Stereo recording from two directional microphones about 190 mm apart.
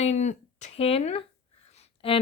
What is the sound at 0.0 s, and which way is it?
Speech, 35° left (ahead or behind).